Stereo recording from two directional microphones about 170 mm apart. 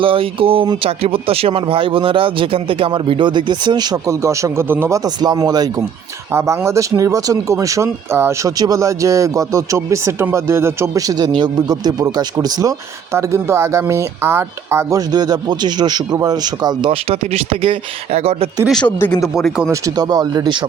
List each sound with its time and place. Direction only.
0.0 s speech: 30° right (ahead or behind)
18.7 s speech: 10° left (ahead or behind)
19.7 s speech: 20° right (ahead or behind)